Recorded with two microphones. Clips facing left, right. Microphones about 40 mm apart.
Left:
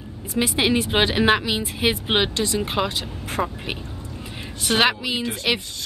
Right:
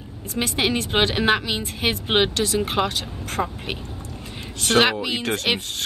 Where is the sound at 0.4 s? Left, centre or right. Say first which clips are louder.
Left 2 dB; centre.